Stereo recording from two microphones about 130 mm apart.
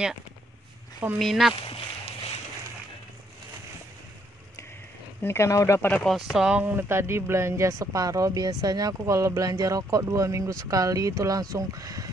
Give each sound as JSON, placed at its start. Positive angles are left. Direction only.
{"t": 1.2, "sound": "speech", "side_deg": 0}
{"t": 1.6, "sound": "a sound", "side_deg": 45}
{"t": 5.2, "sound": "speech", "side_deg": 20}
{"t": 6.1, "sound": "speech", "side_deg": 0}
{"t": 6.6, "sound": "speech", "side_deg": -15}